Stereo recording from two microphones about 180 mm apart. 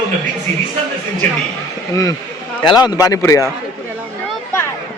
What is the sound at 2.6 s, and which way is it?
Speech, 25° left (ahead or behind).